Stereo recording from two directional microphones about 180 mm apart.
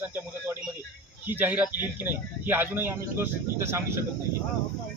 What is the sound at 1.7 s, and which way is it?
Speech, 20° left (ahead or behind).